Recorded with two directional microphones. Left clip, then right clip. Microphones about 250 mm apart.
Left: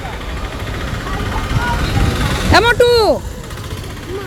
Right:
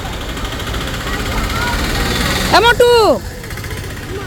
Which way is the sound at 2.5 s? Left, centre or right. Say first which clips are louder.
Right 1 dB; centre.